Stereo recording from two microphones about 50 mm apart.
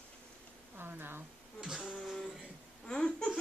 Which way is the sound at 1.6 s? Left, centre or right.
Centre.